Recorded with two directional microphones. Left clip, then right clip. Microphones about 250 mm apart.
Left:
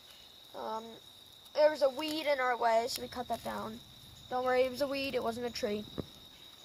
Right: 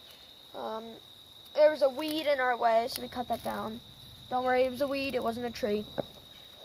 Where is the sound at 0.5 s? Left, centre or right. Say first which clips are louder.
Right 2 dB; centre.